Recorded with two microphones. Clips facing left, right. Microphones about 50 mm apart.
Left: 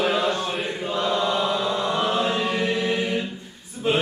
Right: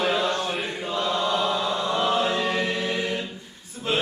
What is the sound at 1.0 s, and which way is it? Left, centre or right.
Chant, centre.